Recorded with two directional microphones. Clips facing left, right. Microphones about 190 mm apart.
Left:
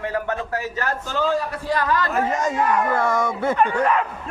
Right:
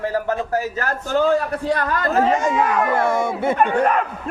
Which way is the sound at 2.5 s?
90° right.